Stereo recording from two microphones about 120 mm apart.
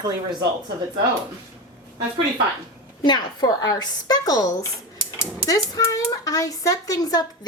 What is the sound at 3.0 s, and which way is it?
A woman's voice, 35° left (ahead or behind).